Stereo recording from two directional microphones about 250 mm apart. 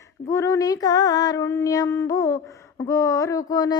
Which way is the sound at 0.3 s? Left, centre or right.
Centre.